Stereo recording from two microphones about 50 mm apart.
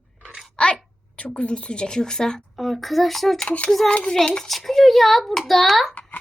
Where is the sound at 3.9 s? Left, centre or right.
Centre.